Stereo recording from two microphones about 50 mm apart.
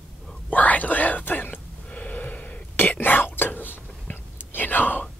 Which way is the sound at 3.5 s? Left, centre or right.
Left.